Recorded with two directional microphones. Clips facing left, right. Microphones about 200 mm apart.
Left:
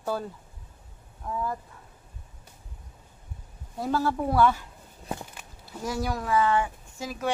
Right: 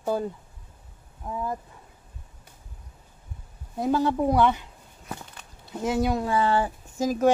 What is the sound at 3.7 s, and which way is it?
Speech, 20° right (ahead or behind).